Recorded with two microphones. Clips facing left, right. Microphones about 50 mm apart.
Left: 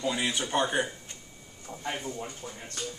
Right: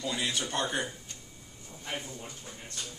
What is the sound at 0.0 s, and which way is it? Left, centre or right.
Speech, centre.